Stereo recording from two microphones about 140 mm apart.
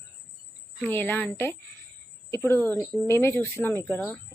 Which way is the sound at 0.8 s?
15° left (ahead or behind).